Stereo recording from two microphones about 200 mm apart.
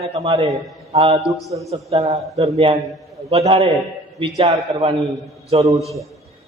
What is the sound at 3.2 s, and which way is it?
Mantra, 30° right (ahead or behind).